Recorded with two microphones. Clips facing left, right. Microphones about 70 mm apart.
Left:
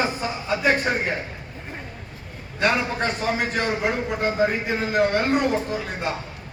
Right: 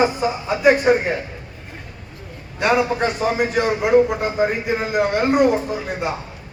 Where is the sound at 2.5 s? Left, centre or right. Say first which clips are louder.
Right 4 dB; centre.